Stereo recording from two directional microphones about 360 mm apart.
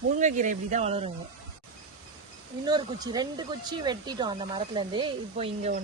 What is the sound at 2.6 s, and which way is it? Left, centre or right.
Speech, centre.